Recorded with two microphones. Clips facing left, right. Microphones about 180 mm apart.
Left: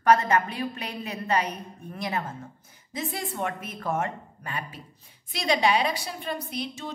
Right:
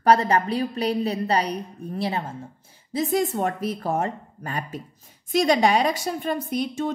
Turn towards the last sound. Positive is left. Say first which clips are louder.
# right 8 dB
turn(degrees=-50)  # may be behind; listen again after turning